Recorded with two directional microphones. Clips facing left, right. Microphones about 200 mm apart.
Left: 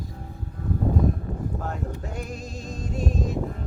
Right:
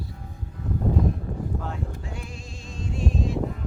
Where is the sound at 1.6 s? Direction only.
45° left (ahead or behind).